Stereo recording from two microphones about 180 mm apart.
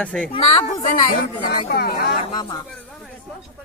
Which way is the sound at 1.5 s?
60° left (ahead or behind).